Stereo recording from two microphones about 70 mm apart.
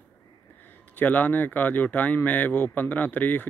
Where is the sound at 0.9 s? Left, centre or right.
Left.